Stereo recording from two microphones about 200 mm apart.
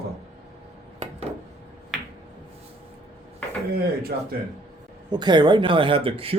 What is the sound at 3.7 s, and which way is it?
Speech, 50° right (ahead or behind).